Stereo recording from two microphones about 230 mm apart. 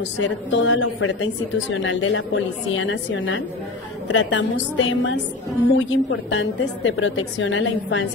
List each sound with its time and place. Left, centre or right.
0.2 s a woman's voice: left